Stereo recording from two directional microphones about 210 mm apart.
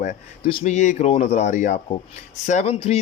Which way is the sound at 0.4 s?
30° left (ahead or behind).